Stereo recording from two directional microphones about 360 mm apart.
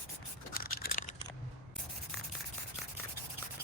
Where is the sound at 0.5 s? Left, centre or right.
Left.